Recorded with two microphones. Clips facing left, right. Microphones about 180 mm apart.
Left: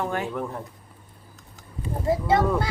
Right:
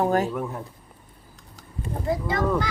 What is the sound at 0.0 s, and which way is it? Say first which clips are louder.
Speech: right 6 dB; 40° right (ahead or behind).